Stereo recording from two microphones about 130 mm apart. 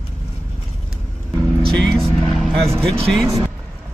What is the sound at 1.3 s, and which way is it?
Vehicle, 5° left (ahead or behind).